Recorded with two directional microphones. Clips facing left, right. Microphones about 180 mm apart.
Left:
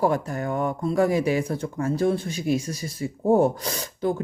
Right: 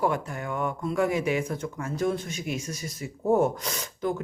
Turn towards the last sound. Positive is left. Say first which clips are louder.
# left 4 dB
turn(degrees=35)  # may be behind; listen again after turning